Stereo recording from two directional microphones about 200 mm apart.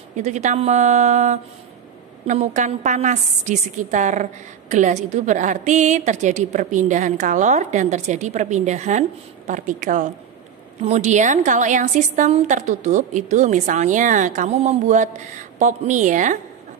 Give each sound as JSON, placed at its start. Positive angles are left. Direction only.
{"t": 0.2, "sound": "a woman's voice", "side_deg": -35}